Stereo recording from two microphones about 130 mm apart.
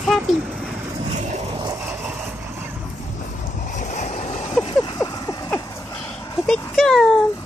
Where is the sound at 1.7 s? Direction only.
15° right (ahead or behind).